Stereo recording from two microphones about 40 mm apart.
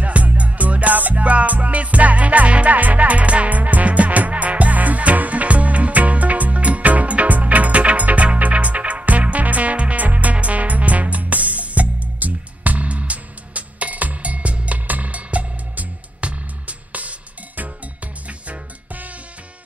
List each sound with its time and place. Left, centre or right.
0.0 s music: right